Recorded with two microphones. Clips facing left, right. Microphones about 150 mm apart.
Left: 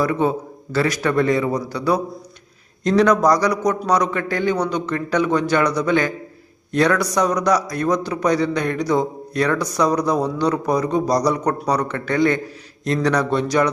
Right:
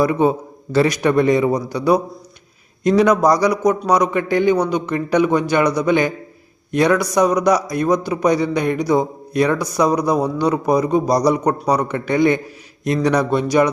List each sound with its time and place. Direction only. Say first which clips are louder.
0.0 s a man's voice: right 3 dB; 15° right (ahead or behind)